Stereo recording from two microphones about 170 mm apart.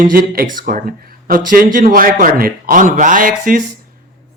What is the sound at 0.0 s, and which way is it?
A man's voice, 55° right (ahead or behind).